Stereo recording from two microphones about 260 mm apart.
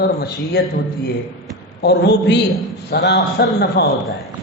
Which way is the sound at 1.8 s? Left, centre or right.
Left.